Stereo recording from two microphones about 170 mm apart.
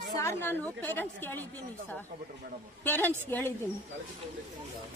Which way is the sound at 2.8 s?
10° left (ahead or behind).